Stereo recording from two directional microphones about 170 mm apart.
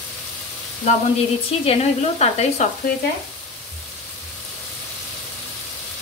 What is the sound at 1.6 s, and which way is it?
A woman's voice, 40° left (ahead or behind).